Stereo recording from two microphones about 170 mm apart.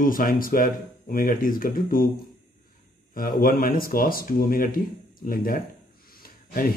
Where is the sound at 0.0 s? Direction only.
55° left (ahead or behind).